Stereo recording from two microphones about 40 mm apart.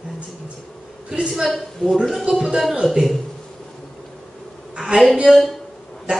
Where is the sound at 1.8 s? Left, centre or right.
Left.